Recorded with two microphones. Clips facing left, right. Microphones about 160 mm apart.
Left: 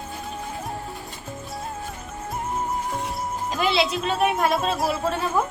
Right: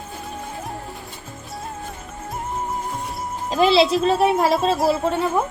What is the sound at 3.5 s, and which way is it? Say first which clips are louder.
A woman's voice: right 8 dB; 30° right (ahead or behind).